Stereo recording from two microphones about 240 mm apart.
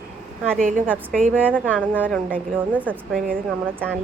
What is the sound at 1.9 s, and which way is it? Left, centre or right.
Speech, centre.